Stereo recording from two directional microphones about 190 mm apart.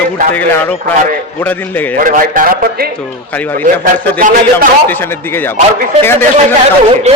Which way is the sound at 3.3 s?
10° left (ahead or behind).